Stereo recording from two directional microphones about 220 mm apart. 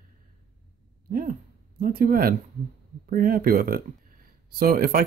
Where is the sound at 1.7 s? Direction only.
40° right (ahead or behind).